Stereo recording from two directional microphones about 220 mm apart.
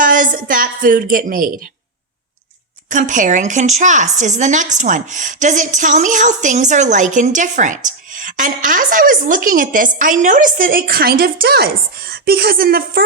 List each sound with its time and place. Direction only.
0.0 s speech: 40° right (ahead or behind)
2.9 s speech: 35° right (ahead or behind)